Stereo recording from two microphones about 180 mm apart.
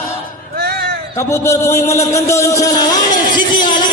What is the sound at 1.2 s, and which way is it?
Speech, 15° left (ahead or behind).